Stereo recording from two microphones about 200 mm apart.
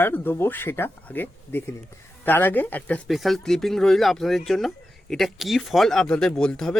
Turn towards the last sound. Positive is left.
turn(degrees=5)  # may be behind; listen again after turning